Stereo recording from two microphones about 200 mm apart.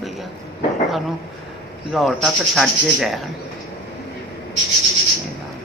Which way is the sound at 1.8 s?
Centre (ahead or behind).